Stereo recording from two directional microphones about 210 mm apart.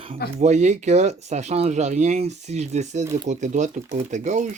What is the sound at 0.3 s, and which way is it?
Speech, 35° right (ahead or behind).